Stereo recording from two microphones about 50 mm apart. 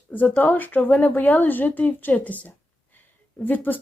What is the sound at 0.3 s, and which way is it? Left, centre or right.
Speech, left.